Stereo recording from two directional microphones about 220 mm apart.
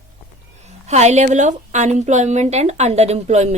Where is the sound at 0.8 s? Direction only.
30° right (ahead or behind).